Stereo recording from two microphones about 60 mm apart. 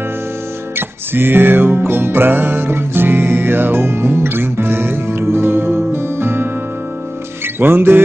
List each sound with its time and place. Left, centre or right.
0.7 s music: right
7.5 s music: right